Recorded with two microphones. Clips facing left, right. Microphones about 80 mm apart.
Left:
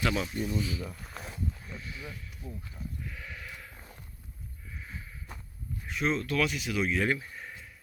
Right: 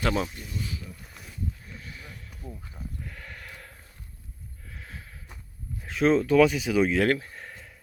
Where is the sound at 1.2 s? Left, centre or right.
Left.